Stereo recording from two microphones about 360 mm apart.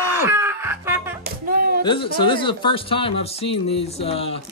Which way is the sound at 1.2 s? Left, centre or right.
Right.